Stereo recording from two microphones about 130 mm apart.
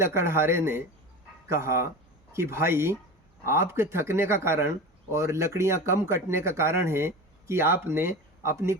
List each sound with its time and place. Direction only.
0.0 s speech: 20° right (ahead or behind)